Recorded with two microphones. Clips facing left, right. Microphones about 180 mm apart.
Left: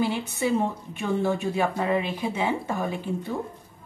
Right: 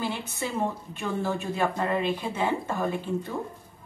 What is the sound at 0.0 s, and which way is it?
Speech, 15° left (ahead or behind).